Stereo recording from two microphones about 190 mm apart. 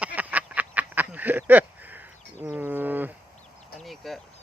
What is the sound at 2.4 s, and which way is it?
Bird, 10° right (ahead or behind).